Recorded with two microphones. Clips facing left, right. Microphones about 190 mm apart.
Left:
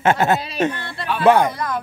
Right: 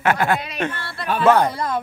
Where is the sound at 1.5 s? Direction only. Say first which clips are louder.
Right 1 dB; 25° right (ahead or behind).